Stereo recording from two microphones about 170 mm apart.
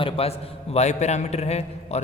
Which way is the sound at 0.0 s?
35° left (ahead or behind).